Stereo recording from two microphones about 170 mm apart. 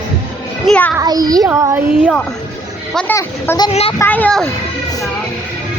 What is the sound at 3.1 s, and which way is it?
A woman's voice, 15° left (ahead or behind).